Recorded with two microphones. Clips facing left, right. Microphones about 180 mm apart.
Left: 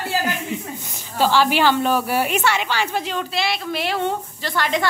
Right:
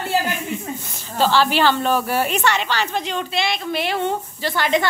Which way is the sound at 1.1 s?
10° left (ahead or behind).